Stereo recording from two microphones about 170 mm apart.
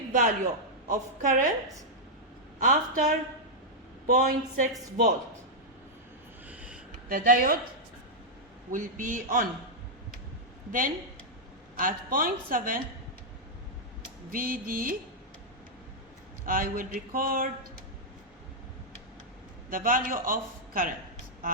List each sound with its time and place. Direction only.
0.1 s a man's voice: 45° right (ahead or behind)
2.6 s speech: 50° right (ahead or behind)
6.5 s a sound: 10° right (ahead or behind)
7.1 s speech: 55° right (ahead or behind)
8.7 s speech: 50° right (ahead or behind)
10.7 s speech: 55° right (ahead or behind)
14.3 s speech: 55° right (ahead or behind)
16.5 s speech: 55° right (ahead or behind)
19.7 s speech: 55° right (ahead or behind)